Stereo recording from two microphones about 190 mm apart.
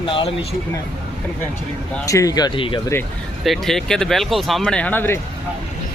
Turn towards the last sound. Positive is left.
turn(degrees=10)  # may be behind; listen again after turning